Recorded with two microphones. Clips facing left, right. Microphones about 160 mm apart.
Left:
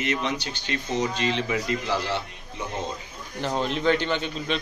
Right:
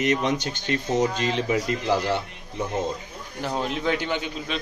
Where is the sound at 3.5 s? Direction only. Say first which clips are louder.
Left 2 dB; 5° right (ahead or behind).